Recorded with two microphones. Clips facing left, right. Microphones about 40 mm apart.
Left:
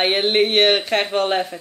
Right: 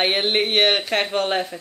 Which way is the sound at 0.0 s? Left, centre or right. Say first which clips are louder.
Left 3 dB; centre.